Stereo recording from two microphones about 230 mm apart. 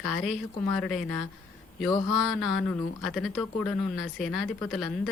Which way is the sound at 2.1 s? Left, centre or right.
Centre.